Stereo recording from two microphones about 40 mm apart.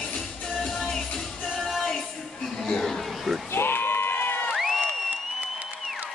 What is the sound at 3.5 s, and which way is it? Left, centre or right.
Crowd, left.